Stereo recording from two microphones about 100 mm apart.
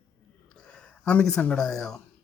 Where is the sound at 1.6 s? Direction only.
5° left (ahead or behind).